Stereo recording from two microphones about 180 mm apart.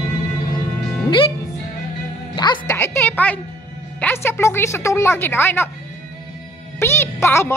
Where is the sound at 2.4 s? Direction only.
25° left (ahead or behind).